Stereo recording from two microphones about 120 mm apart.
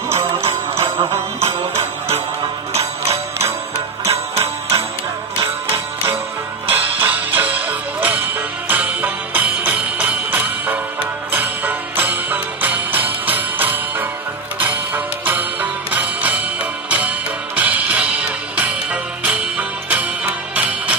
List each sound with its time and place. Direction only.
0.2 s music: 50° right (ahead or behind)
1.4 s jingle bell: 65° right (ahead or behind)
2.7 s music: 60° right (ahead or behind)
6.7 s music: 15° right (ahead or behind)
15.2 s music: 15° right (ahead or behind)
17.6 s music: 10° right (ahead or behind)